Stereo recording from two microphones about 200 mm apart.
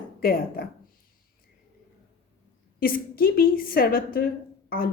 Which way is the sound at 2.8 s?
45° left (ahead or behind).